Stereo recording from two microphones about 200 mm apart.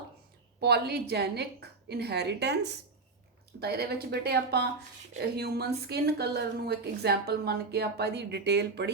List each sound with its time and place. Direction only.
0.6 s a woman's voice: 55° right (ahead or behind)